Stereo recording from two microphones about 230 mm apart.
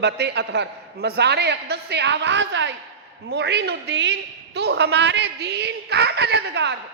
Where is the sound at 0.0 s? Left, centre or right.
Right.